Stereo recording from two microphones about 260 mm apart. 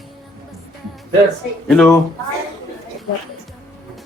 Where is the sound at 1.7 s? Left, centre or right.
Centre.